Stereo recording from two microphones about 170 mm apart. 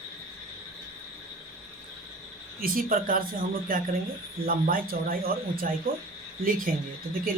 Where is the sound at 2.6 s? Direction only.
55° right (ahead or behind).